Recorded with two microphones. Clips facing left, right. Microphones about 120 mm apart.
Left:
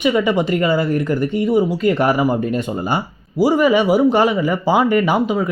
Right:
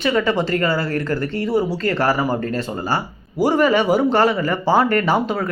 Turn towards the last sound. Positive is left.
turn(degrees=10)  # may be behind; listen again after turning